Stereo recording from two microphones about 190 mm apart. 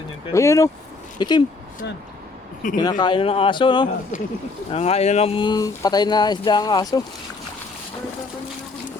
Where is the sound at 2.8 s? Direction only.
20° left (ahead or behind).